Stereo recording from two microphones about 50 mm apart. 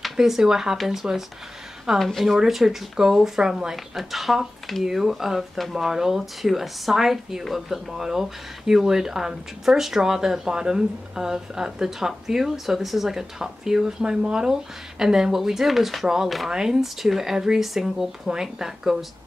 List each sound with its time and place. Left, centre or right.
0.0 s speech: centre
2.0 s speech: centre